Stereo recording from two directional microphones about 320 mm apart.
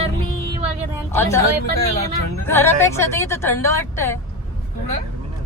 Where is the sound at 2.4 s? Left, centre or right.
Centre.